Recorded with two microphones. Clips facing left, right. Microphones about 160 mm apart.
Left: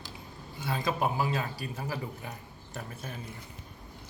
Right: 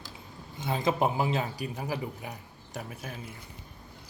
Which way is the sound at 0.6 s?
20° right (ahead or behind).